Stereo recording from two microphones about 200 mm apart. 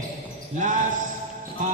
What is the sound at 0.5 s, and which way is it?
Speech, 40° right (ahead or behind).